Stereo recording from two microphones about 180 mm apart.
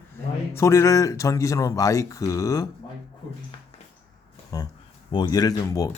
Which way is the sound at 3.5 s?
30° left (ahead or behind).